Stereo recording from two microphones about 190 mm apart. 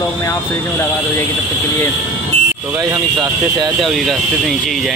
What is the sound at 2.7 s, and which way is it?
Speech, 20° right (ahead or behind).